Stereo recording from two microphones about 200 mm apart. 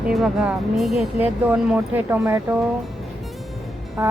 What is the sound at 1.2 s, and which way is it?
Speech, 5° right (ahead or behind).